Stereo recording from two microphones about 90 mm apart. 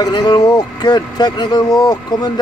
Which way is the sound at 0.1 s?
55° left (ahead or behind).